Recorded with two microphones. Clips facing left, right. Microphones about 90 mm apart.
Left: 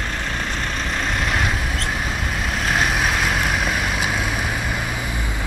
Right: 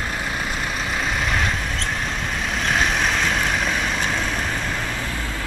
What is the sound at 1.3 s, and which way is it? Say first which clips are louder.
Vehicle: left 1 dB; centre (ahead or behind).